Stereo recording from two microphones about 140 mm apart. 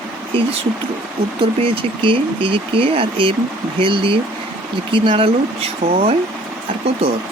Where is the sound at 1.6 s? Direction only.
40° right (ahead or behind).